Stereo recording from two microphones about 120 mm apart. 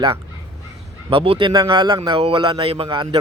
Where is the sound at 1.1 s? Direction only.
50° right (ahead or behind).